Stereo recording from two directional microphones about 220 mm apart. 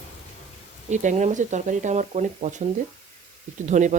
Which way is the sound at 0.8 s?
35° right (ahead or behind).